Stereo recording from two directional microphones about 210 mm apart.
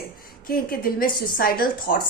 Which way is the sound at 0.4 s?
45° left (ahead or behind).